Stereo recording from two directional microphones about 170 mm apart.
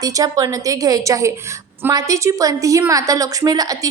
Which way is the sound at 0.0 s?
20° right (ahead or behind).